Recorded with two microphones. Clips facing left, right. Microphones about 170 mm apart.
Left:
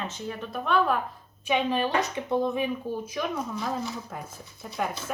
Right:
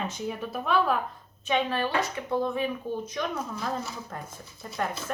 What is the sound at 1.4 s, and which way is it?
Speech, 15° left (ahead or behind).